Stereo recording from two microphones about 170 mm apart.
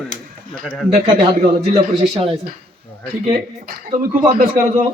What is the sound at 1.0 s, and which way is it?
A man's voice, 35° right (ahead or behind).